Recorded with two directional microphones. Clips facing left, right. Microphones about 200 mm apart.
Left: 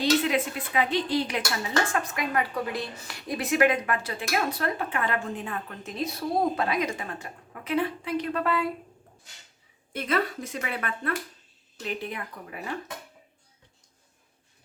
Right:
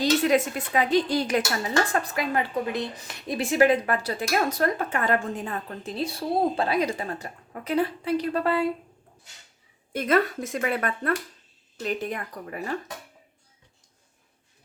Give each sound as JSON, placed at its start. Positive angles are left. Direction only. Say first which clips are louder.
{"t": 0.0, "sound": "a woman's voice", "louder": "right 3 dB", "side_deg": -45}
{"t": 9.9, "sound": "speech", "louder": "right 5 dB", "side_deg": -50}